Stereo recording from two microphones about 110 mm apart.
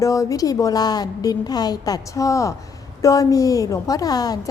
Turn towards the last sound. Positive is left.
turn(degrees=35)  # may be behind; listen again after turning